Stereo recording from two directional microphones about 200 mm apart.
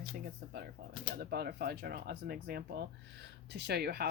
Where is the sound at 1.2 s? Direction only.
55° right (ahead or behind).